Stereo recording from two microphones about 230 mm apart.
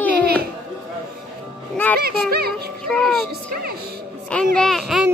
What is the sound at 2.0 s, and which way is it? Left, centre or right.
A child's voice, right.